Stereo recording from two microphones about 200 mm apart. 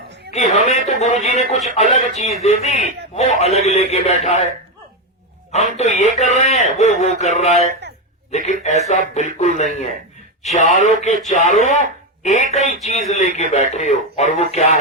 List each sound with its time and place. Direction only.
0.3 s a sound: 35° left (ahead or behind)
1.7 s a man's voice: 35° left (ahead or behind)
5.5 s a man's voice: 35° left (ahead or behind)